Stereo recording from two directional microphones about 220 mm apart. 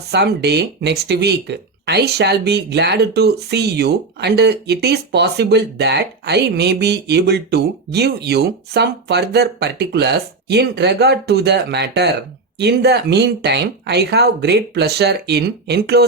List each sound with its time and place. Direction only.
0.1 s speech: 50° right (ahead or behind)